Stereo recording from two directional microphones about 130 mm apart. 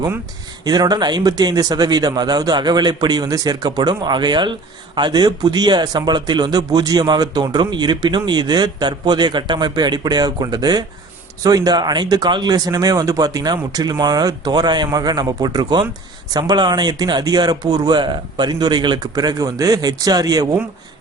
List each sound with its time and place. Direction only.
0.6 s a man's voice: 30° right (ahead or behind)